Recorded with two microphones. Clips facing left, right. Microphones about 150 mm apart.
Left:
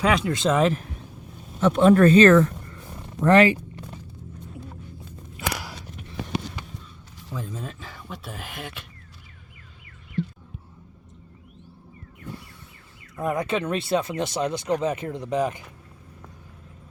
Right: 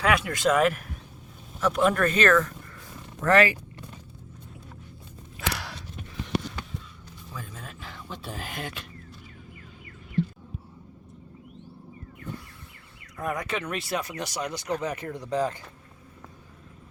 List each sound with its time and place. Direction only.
0.0 s speech: 20° left (ahead or behind)
7.8 s speech: 10° left (ahead or behind)
13.1 s speech: 25° left (ahead or behind)